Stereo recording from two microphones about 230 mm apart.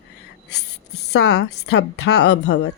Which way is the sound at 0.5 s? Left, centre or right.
Left.